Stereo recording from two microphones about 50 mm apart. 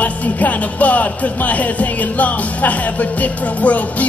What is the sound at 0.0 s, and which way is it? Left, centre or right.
Speech, left.